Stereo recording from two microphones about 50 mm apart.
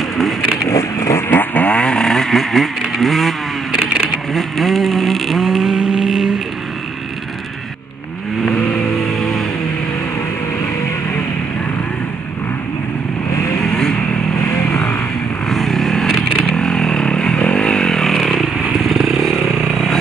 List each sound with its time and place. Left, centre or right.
0.7 s a sound: left
1.3 s vehicle: left
2.0 s vehicle: centre
3.7 s vehicle: centre
4.3 s vehicle: centre
13.6 s vehicle: centre
15.4 s vehicle: centre
18.1 s motorcycle: centre